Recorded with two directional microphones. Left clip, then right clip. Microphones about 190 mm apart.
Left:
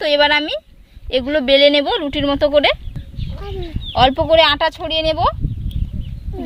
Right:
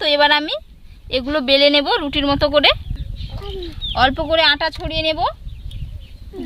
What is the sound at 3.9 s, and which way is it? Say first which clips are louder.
Speech: left 4 dB; 15° left (ahead or behind).